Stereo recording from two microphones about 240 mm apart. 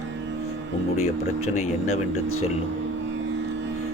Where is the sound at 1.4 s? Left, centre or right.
Left.